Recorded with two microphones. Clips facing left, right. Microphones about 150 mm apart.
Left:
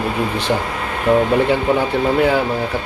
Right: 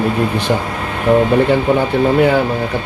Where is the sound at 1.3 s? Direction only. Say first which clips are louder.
Right 3 dB; centre (ahead or behind).